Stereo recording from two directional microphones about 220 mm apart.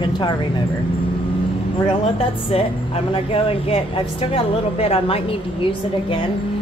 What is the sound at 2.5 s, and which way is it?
Speech, 25° left (ahead or behind).